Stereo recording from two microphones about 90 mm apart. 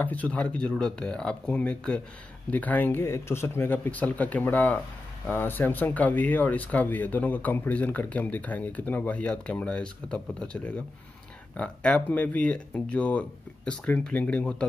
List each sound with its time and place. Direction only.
0.0 s speech: 15° left (ahead or behind)